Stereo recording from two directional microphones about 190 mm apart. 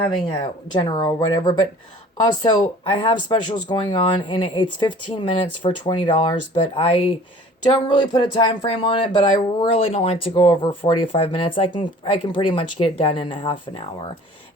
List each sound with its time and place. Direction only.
0.0 s speech: 25° left (ahead or behind)
2.6 s speech: 30° left (ahead or behind)